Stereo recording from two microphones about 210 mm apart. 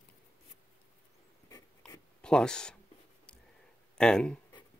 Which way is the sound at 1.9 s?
5° left (ahead or behind).